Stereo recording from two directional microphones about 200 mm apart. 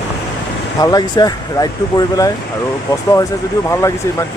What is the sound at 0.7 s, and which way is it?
Speech, 20° left (ahead or behind).